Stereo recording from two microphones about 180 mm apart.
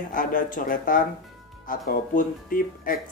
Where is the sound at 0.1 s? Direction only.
50° left (ahead or behind).